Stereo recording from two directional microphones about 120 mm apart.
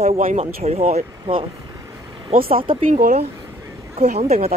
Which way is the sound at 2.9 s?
85° right.